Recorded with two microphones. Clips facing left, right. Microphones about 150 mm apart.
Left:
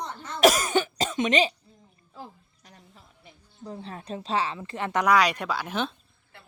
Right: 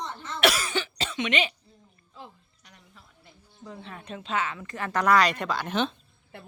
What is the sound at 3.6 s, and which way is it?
Speech, 35° left (ahead or behind).